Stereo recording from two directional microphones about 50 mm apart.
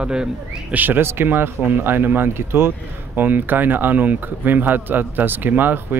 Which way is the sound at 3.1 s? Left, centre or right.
Right.